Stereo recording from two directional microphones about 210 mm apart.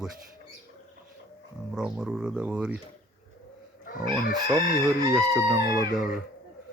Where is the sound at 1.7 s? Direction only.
5° right (ahead or behind).